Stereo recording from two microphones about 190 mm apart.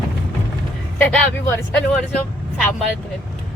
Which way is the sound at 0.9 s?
5° left (ahead or behind).